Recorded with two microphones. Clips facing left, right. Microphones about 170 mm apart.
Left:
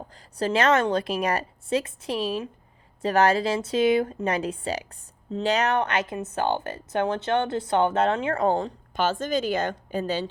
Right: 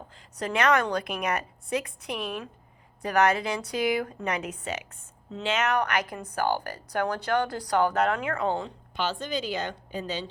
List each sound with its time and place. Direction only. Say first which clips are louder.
0.3 s a woman's voice: left 3 dB; 30° left (ahead or behind)
8.4 s a woman's voice: left 5 dB; 40° left (ahead or behind)